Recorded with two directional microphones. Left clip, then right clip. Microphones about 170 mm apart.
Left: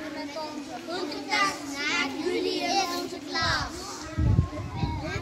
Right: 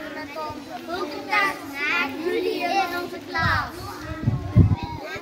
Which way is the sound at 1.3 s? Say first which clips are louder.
Right 4 dB; 10° left (ahead or behind).